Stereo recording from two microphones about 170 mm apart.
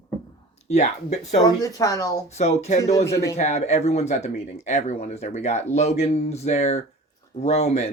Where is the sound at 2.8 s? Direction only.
20° left (ahead or behind).